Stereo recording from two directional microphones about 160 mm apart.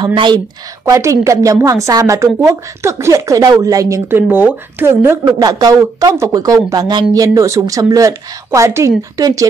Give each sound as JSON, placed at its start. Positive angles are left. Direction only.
{"t": 0.0, "sound": "a woman's voice", "side_deg": -30}